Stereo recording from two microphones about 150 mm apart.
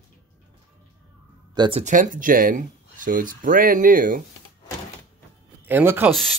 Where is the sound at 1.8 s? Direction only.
55° right (ahead or behind).